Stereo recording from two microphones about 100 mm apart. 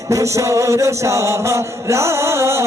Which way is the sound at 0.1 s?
30° right (ahead or behind).